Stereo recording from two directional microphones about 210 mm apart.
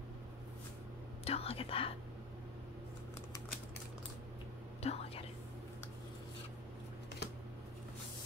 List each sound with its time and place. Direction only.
1.2 s whispering: 30° left (ahead or behind)
4.8 s whispering: 30° left (ahead or behind)